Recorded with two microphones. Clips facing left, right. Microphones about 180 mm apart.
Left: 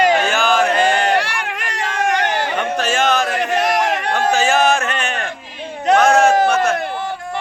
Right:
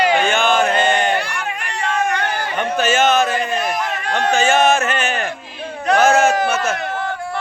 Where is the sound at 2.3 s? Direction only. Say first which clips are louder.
Left 3 dB; 90° left.